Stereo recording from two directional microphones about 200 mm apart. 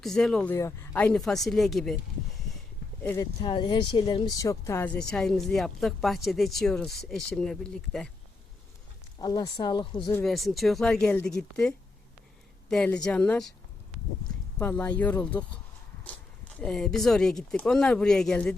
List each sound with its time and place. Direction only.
0.0 s speech: centre (ahead or behind)
3.0 s speech: 10° left (ahead or behind)
3.4 s speech: 25° left (ahead or behind); by 8.1 s centre (ahead or behind)
9.1 s speech: 20° left (ahead or behind)
10.2 s speech: centre (ahead or behind)
12.7 s speech: 5° left (ahead or behind)
14.6 s speech: 10° left (ahead or behind)
16.6 s speech: 5° left (ahead or behind)